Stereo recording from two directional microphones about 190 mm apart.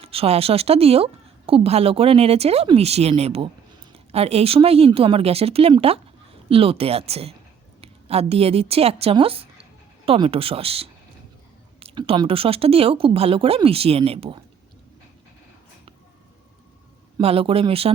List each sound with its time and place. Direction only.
0.0 s a woman's voice: 30° right (ahead or behind)
17.2 s speech: 30° right (ahead or behind)